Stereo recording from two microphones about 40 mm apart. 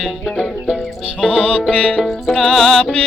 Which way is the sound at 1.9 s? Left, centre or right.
Centre.